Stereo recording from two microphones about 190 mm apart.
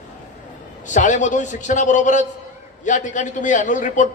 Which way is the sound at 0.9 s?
40° left (ahead or behind).